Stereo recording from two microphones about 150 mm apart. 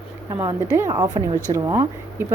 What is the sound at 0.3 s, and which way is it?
A woman's voice, 15° right (ahead or behind).